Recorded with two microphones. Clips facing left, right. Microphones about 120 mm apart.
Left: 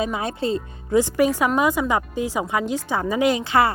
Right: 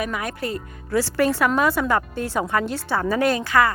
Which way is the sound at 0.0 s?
25° left (ahead or behind).